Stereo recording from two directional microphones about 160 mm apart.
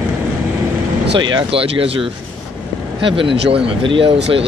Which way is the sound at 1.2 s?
30° right (ahead or behind).